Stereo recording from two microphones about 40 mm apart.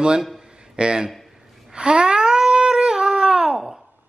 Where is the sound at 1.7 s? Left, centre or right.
Right.